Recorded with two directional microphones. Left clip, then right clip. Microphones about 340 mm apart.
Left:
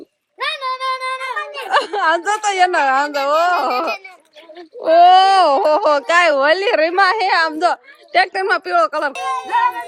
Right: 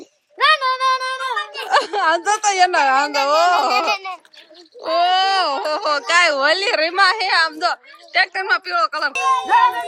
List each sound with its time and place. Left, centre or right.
0.3 s a sound: right
1.4 s a woman's voice: centre
9.1 s jingle: right